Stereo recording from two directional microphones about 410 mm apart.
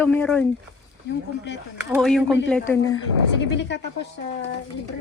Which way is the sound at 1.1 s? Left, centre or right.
Left.